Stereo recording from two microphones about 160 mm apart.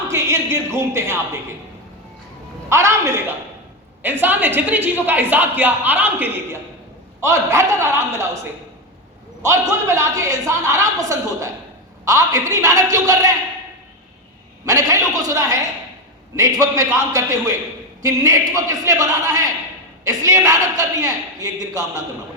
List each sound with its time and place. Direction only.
0.1 s a woman's voice: 15° right (ahead or behind)
2.6 s a woman's voice: 15° right (ahead or behind)
9.4 s a woman's voice: 20° right (ahead or behind)
14.6 s a woman's voice: 20° right (ahead or behind)